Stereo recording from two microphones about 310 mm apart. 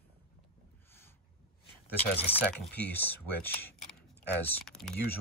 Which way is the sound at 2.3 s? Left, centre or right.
Centre.